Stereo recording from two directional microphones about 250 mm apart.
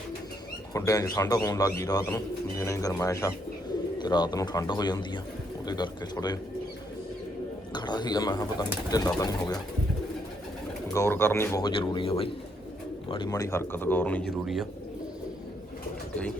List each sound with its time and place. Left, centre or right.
0.7 s speech: centre
7.7 s speech: centre
10.9 s speech: centre